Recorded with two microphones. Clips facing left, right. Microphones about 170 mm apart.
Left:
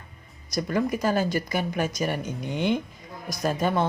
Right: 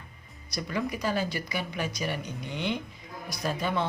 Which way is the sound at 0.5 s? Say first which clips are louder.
Left 6 dB; 45° left (ahead or behind).